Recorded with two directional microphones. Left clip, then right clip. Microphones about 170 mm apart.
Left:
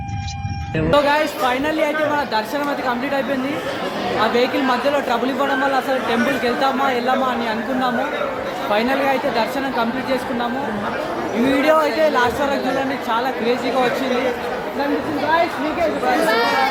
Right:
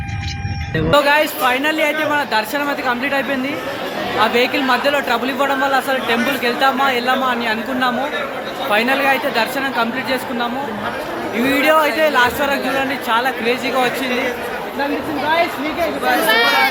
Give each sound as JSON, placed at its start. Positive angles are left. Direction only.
{"t": 0.9, "sound": "speech", "side_deg": -10}
{"t": 11.4, "sound": "speech", "side_deg": -10}
{"t": 16.3, "sound": "speech", "side_deg": -20}